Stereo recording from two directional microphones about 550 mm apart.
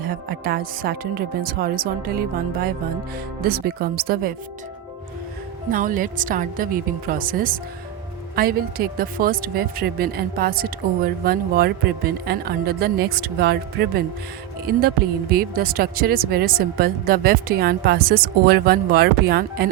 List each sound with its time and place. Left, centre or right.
0.0 s speech: centre
5.7 s speech: centre